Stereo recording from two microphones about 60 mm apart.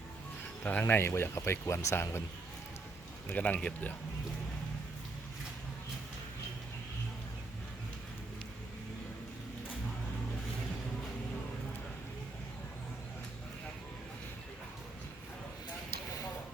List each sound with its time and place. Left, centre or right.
0.6 s speech: left
0.9 s speech: left
3.3 s speech: left